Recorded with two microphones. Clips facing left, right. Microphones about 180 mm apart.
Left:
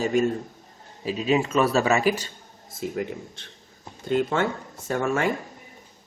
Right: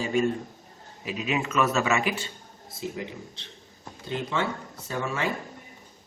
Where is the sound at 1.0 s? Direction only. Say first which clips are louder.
Left 6 dB; 30° left (ahead or behind); by 5.3 s 50° left (ahead or behind).